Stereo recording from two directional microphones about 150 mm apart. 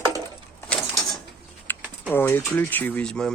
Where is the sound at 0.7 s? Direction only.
5° left (ahead or behind).